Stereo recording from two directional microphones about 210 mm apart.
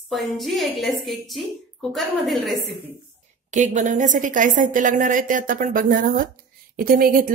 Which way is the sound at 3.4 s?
35° right (ahead or behind).